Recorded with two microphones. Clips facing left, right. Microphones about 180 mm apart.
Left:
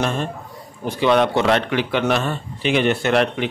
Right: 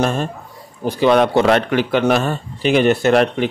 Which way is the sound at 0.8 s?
40° right (ahead or behind).